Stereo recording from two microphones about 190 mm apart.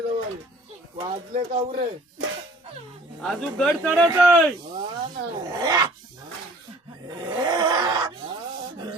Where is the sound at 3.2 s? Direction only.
Centre (ahead or behind).